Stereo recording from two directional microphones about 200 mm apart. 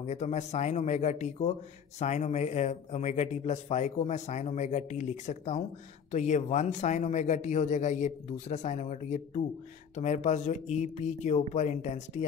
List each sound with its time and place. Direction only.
0.0 s speech: 35° left (ahead or behind)